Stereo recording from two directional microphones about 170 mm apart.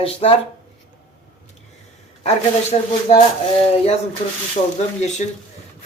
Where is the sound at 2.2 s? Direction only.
40° left (ahead or behind).